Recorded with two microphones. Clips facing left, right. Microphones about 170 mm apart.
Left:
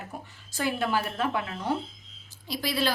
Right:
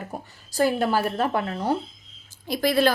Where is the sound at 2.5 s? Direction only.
50° right (ahead or behind).